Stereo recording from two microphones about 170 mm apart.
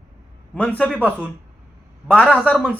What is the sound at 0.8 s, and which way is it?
A man's voice, 10° left (ahead or behind).